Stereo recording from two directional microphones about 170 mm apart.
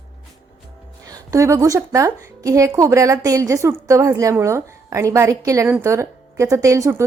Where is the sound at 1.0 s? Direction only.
20° right (ahead or behind).